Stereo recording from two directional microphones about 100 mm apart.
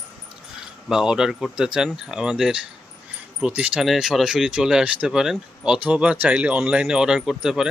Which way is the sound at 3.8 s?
5° right (ahead or behind).